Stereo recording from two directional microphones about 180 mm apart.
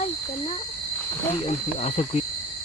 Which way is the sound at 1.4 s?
35° left (ahead or behind).